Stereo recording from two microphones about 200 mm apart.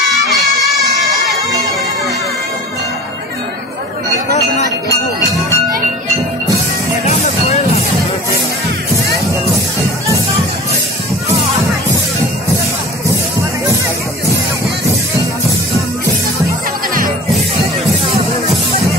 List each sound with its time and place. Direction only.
0.1 s crowd: centre (ahead or behind)
4.3 s a sound: 35° left (ahead or behind)
7.1 s music: 35° left (ahead or behind)
18.0 s music: 30° right (ahead or behind)